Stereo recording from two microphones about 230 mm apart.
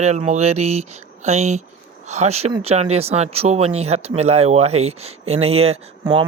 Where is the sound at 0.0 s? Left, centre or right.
Right.